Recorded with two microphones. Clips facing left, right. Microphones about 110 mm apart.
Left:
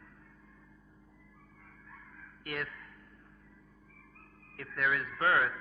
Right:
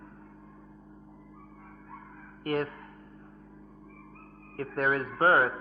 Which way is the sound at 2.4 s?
40° right (ahead or behind).